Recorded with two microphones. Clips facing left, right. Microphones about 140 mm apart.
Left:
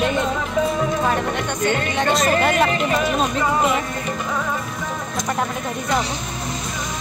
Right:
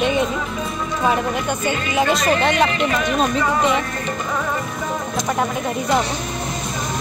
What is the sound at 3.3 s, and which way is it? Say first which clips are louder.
Speech: right 1 dB; 5° left (ahead or behind).